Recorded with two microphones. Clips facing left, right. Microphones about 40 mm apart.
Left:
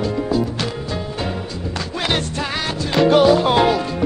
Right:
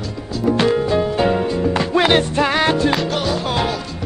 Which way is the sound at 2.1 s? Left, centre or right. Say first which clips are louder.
Right 6 dB; centre.